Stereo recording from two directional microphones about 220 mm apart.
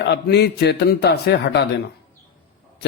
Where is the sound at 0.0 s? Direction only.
50° left (ahead or behind).